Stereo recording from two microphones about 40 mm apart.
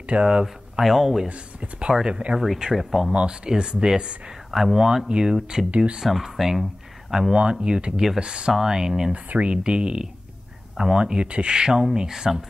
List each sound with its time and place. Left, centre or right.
0.1 s speech: right
0.8 s speech: centre
1.6 s speech: right
2.6 s speech: centre
3.1 s speech: right
4.5 s speech: centre
4.7 s speech: centre
6.3 s speech: centre
7.6 s speech: right
9.1 s speech: right; by 12.4 s centre